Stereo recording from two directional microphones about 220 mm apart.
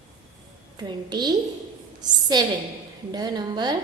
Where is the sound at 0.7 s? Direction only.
20° right (ahead or behind).